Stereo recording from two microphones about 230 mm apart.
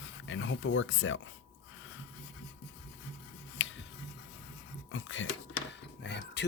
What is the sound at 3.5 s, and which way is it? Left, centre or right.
Tick, left.